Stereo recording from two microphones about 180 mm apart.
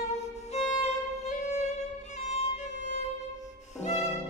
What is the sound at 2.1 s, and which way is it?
Violin, 35° left (ahead or behind).